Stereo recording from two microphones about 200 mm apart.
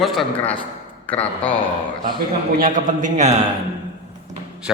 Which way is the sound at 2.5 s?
40° right (ahead or behind).